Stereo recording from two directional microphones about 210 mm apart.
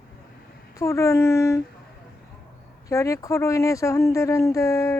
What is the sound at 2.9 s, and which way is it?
Speech, 15° left (ahead or behind).